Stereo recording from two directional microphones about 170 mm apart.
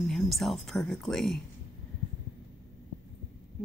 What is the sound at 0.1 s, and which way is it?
A woman's voice, centre (ahead or behind).